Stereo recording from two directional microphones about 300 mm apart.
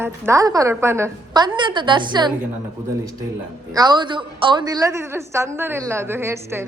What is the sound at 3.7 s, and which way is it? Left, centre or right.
A woman's voice, centre.